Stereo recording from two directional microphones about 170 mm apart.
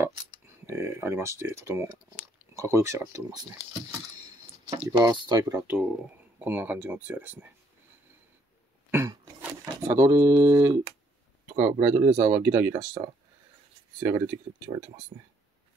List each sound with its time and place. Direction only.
0.7 s speech: 15° right (ahead or behind)
4.8 s speech: 20° right (ahead or behind)
5.8 s speech: 5° right (ahead or behind)
8.9 s a sound: 15° right (ahead or behind)
11.5 s speech: 15° right (ahead or behind)
14.0 s speech: 15° right (ahead or behind)